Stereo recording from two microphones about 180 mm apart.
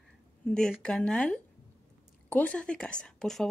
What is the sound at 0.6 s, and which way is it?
Speech, 5° left (ahead or behind).